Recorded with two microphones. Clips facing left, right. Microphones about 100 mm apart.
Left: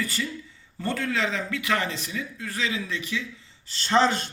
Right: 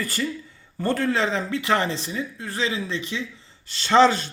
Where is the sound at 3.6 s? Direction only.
85° right.